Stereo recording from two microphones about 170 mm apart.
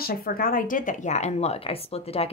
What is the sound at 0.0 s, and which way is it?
Speech, 60° left (ahead or behind).